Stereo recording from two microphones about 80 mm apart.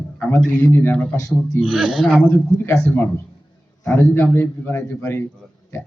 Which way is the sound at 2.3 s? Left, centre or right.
Left.